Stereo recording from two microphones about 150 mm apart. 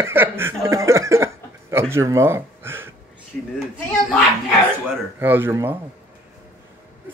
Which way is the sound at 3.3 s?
5° left (ahead or behind).